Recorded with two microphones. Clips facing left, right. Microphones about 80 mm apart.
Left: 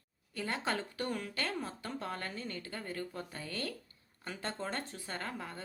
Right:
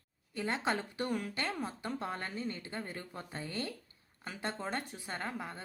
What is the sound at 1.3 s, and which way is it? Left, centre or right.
A woman's voice, right.